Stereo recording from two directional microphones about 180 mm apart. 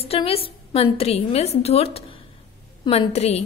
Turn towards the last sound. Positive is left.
turn(degrees=35)  # may be behind; listen again after turning